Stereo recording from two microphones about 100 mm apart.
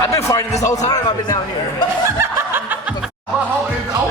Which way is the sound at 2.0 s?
25° right (ahead or behind).